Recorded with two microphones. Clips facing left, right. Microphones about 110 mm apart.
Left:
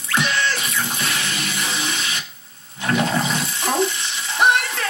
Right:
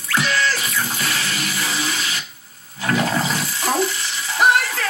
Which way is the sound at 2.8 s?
25° left (ahead or behind).